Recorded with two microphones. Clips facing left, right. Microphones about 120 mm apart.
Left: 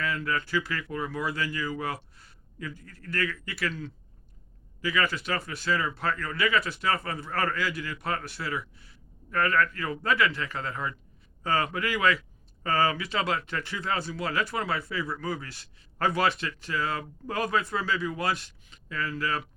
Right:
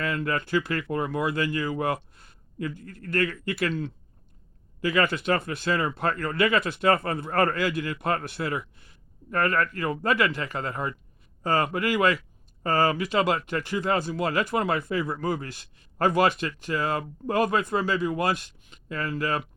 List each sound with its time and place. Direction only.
0.0 s speech: 50° right (ahead or behind)
4.8 s speech: 50° right (ahead or behind)